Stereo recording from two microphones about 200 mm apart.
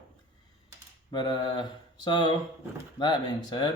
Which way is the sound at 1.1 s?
20° left (ahead or behind).